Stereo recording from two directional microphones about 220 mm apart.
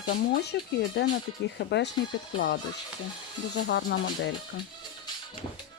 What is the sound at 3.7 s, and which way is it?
Speech, 50° left (ahead or behind).